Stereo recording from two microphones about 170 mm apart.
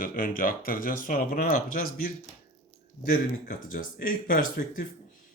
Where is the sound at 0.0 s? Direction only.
55° left (ahead or behind).